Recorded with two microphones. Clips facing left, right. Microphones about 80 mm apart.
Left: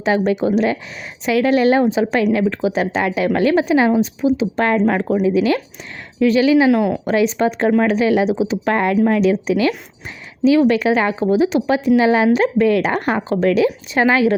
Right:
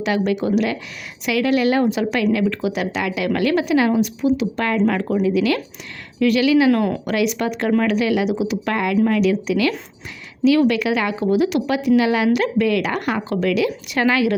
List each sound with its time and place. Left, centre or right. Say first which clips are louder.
0.0 s a woman's voice: left 3 dB; left
6.7 s speech: left 2 dB; centre
7.1 s a woman's voice: left 4 dB; left